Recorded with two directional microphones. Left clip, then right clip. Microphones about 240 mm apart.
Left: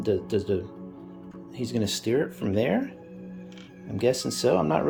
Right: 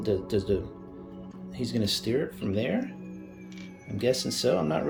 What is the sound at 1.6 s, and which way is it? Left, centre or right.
Speech, centre.